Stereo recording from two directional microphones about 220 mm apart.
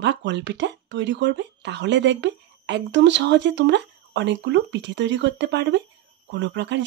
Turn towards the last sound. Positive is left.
turn(degrees=-55)  # may be behind; listen again after turning